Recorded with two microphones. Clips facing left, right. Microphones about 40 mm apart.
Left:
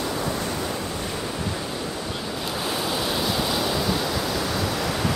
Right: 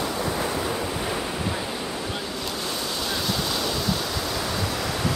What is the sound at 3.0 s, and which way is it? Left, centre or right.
Waves, centre.